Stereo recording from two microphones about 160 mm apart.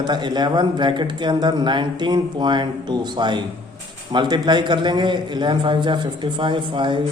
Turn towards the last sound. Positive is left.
turn(degrees=-30)  # may be behind; listen again after turning